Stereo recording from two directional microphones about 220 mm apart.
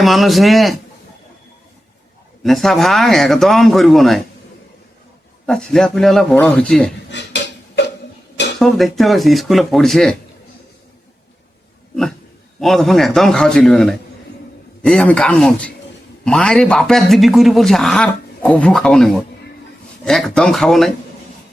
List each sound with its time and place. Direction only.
0.0 s a man's voice: centre (ahead or behind)
2.4 s a man's voice: centre (ahead or behind)
5.5 s a man's voice: 5° left (ahead or behind)
7.1 s a sound: 55° left (ahead or behind)
8.5 s a man's voice: centre (ahead or behind)
12.5 s a man's voice: centre (ahead or behind)